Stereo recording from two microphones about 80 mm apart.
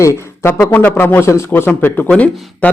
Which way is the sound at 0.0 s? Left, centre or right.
Left.